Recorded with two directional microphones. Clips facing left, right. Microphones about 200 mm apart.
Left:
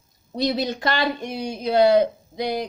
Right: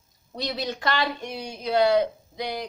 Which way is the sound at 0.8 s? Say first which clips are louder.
Left 2 dB; 40° left (ahead or behind).